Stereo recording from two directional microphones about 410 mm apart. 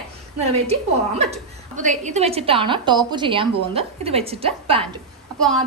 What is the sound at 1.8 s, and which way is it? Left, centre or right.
A woman's voice, centre.